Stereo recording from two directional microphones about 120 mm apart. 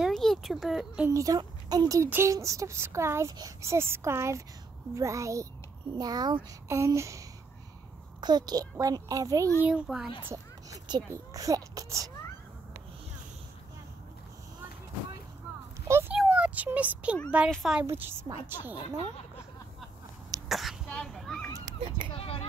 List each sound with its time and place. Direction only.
0.0 s speech: 5° left (ahead or behind)
1.1 s a child's voice: 30° right (ahead or behind)
6.7 s a child's voice: 25° right (ahead or behind)
9.6 s a child's voice: 10° right (ahead or behind)
10.2 s speech: 25° right (ahead or behind)
16.1 s speech: 10° right (ahead or behind)
17.5 s speech: centre (ahead or behind)
17.8 s a child's voice: 20° right (ahead or behind)
20.4 s throat clearing: centre (ahead or behind)
21.7 s a child's voice: 60° right (ahead or behind)
22.1 s a sound: 55° left (ahead or behind)